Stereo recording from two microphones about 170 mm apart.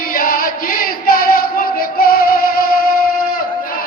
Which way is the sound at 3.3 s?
60° left (ahead or behind).